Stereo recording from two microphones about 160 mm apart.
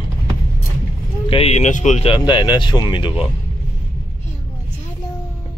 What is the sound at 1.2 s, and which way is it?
Speech, 35° left (ahead or behind).